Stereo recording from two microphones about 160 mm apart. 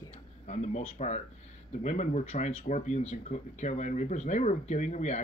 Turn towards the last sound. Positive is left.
turn(degrees=45)  # may be behind; listen again after turning